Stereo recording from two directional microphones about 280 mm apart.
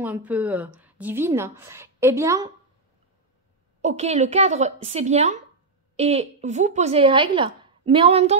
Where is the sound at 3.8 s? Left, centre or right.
Right.